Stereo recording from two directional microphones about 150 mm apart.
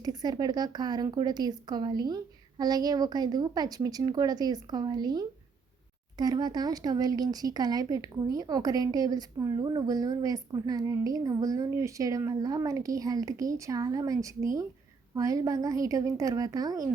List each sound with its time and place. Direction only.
0.0 s speech: 25° right (ahead or behind)